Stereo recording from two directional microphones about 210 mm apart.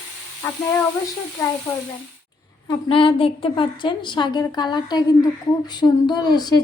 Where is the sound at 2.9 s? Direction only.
25° left (ahead or behind).